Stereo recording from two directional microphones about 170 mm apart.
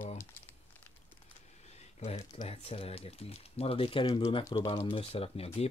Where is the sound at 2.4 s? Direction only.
35° left (ahead or behind).